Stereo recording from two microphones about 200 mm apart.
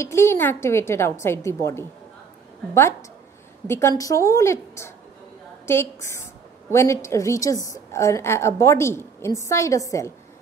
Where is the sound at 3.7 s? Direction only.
15° left (ahead or behind).